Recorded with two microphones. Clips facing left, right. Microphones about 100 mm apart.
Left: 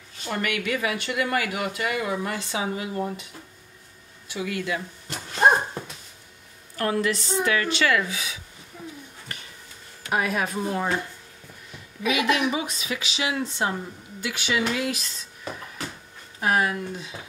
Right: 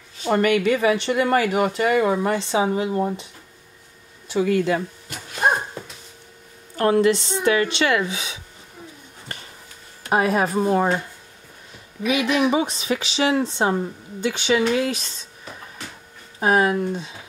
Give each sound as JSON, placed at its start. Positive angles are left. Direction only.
{"t": 0.3, "sound": "speech", "side_deg": -35}
{"t": 4.3, "sound": "speech", "side_deg": -35}
{"t": 6.8, "sound": "speech", "side_deg": -25}
{"t": 10.0, "sound": "speech", "side_deg": -35}
{"t": 12.1, "sound": "speech", "side_deg": -30}
{"t": 16.3, "sound": "speech", "side_deg": -25}